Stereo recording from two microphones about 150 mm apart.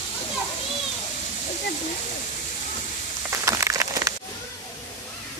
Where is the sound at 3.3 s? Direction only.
20° right (ahead or behind).